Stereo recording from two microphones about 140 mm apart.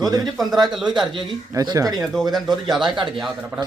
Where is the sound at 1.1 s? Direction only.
35° right (ahead or behind).